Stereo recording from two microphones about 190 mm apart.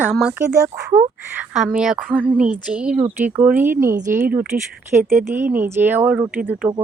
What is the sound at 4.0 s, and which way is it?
Speech, 40° right (ahead or behind).